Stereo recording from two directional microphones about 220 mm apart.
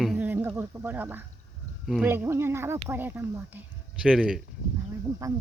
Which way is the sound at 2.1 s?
10° right (ahead or behind).